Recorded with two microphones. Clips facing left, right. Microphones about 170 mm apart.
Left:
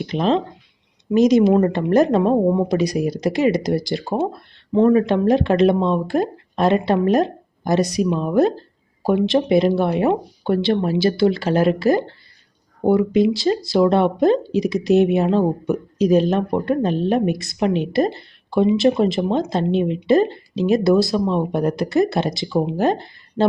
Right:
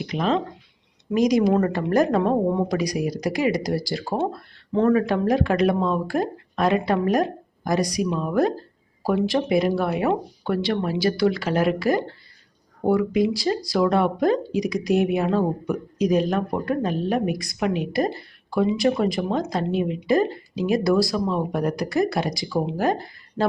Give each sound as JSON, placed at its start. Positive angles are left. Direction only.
{"t": 0.0, "sound": "speech", "side_deg": 30}